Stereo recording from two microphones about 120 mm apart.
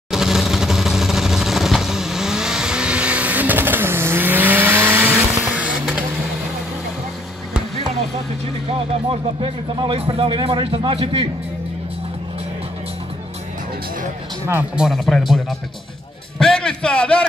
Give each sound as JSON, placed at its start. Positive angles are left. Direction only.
{"t": 0.1, "sound": "vehicle", "side_deg": -5}
{"t": 8.7, "sound": "speech", "side_deg": -50}
{"t": 14.4, "sound": "speech", "side_deg": -15}
{"t": 14.8, "sound": "a man's voice", "side_deg": 0}